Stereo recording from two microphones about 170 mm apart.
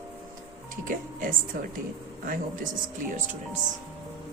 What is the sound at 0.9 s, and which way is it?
Speech, 50° right (ahead or behind).